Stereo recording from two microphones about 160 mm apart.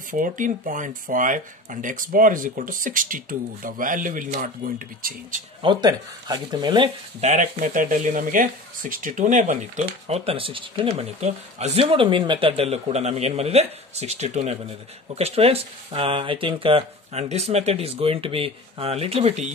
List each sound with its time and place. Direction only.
0.1 s speech: 55° right (ahead or behind)
5.6 s speech: 30° right (ahead or behind)
7.2 s speech: 50° right (ahead or behind)